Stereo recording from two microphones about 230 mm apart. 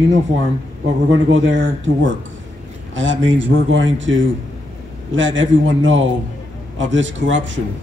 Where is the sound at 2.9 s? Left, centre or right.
Right.